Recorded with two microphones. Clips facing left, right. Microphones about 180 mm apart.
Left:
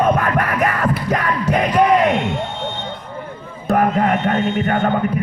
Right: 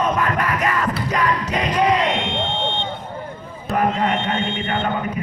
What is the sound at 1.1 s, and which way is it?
Music, 55° left (ahead or behind).